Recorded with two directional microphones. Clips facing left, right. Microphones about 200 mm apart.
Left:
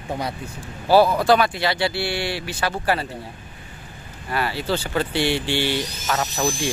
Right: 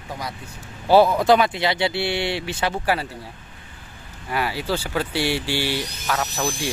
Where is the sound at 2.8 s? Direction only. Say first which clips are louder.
Left 2 dB; 10° right (ahead or behind).